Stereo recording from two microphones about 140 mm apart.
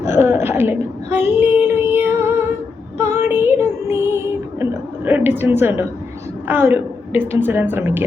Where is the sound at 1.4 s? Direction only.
10° right (ahead or behind).